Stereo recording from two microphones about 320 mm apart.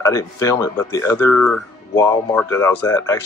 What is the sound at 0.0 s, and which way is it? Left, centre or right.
Speech, centre.